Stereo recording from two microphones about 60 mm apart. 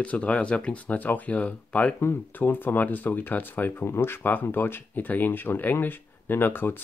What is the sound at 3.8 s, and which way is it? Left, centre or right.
Speech, left.